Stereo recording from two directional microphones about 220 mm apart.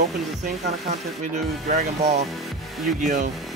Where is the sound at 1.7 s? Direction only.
30° right (ahead or behind).